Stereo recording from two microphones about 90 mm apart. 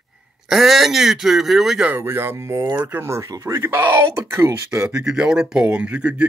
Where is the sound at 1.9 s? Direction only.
25° right (ahead or behind).